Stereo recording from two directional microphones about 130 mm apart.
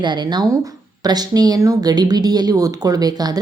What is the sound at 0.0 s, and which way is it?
Speech, 35° right (ahead or behind).